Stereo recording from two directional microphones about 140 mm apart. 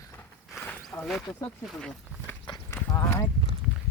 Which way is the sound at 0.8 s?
5° left (ahead or behind).